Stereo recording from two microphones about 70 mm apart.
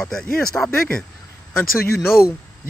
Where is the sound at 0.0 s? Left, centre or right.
Centre.